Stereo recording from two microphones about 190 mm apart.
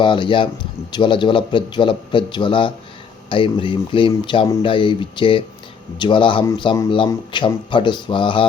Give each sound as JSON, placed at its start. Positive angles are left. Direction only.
{"t": 0.0, "sound": "speech", "side_deg": 25}